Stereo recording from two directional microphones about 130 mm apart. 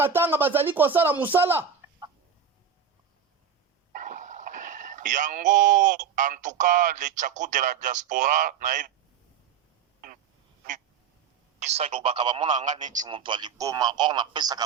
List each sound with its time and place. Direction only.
0.0 s speech: 15° right (ahead or behind)
3.9 s speech: 85° right
11.6 s a man's voice: 55° right (ahead or behind)
12.4 s a man's voice: 70° right (ahead or behind)
13.0 s a man's voice: 40° right (ahead or behind)
13.6 s a man's voice: 30° right (ahead or behind)